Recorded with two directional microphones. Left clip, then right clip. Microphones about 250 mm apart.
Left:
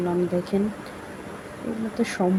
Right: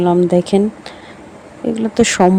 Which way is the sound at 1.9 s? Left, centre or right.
Right.